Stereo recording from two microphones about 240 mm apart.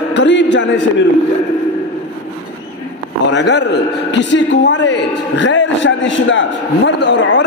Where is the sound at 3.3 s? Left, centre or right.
Left.